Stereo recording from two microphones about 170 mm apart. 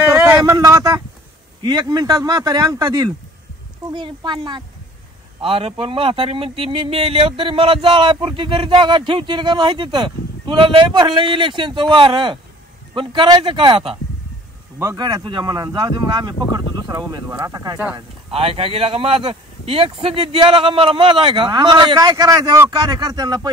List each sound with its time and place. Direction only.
0.1 s a sound: 10° right (ahead or behind)
1.6 s speech: 20° right (ahead or behind)
14.8 s speech: 20° right (ahead or behind)
17.9 s speech: 35° right (ahead or behind)